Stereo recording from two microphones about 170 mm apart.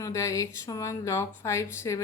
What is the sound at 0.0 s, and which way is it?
Speech, 15° left (ahead or behind).